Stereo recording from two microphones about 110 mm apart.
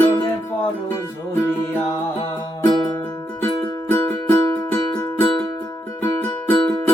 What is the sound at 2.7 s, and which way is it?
Music, 40° left (ahead or behind).